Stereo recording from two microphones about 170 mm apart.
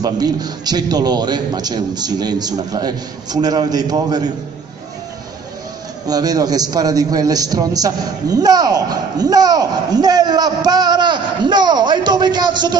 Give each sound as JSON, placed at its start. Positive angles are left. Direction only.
{"t": 0.0, "sound": "a man's voice", "side_deg": -25}
{"t": 6.0, "sound": "a man's voice", "side_deg": -20}